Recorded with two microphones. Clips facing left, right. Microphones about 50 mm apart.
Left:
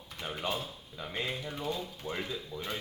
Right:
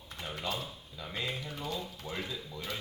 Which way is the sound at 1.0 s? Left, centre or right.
Left.